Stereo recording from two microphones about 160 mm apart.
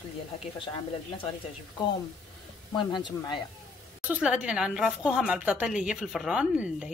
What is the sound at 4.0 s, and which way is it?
A woman's voice, 10° right (ahead or behind).